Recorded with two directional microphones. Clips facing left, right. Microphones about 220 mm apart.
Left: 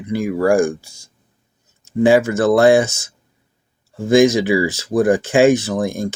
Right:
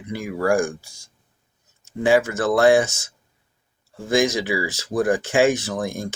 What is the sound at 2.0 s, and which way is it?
Speech, 25° left (ahead or behind).